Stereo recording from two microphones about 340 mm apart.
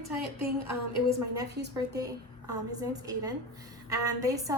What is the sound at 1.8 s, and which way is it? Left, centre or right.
A woman's voice, centre.